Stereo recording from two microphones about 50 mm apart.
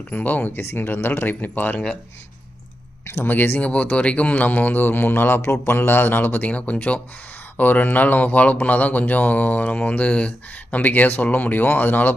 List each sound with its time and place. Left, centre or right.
0.1 s speech: left
3.2 s speech: left
3.6 s speech: left
5.4 s speech: left
6.5 s speech: left